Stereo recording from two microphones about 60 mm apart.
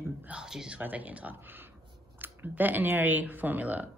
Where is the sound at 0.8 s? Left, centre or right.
Right.